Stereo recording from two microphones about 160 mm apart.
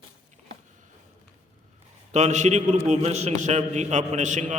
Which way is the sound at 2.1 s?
45° right (ahead or behind).